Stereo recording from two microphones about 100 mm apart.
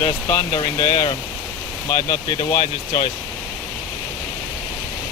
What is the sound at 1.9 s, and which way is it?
Speech, 90° left.